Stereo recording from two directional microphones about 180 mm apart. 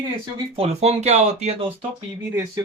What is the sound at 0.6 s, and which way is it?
Speech, 40° right (ahead or behind).